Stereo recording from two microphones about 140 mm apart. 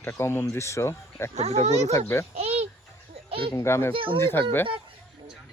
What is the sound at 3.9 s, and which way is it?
Speech, 40° right (ahead or behind).